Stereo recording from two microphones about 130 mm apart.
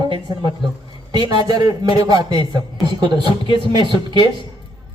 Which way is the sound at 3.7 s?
35° right (ahead or behind).